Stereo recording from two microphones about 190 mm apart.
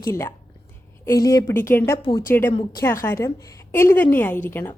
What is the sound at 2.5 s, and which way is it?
A woman's voice, 25° left (ahead or behind).